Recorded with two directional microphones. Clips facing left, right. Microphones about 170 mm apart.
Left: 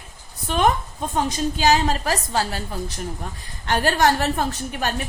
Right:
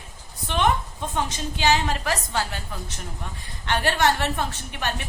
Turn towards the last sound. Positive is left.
turn(degrees=40)  # may be behind; listen again after turning